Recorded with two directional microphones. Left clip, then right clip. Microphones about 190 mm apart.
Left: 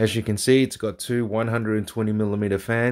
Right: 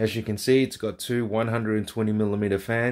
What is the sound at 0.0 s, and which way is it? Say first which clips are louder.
Speech: left 3 dB; 35° left (ahead or behind).